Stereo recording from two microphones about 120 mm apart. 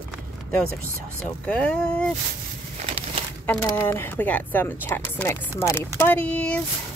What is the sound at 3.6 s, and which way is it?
Speech, 20° left (ahead or behind).